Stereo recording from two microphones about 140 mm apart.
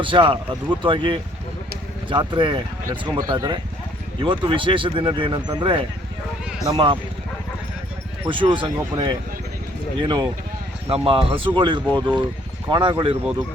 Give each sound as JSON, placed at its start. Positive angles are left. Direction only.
{"t": 0.0, "sound": "speech", "side_deg": -35}
{"t": 8.3, "sound": "speech", "side_deg": -35}